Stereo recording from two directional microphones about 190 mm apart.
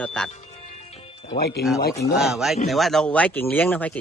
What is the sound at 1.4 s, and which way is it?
Speech, 55° left (ahead or behind).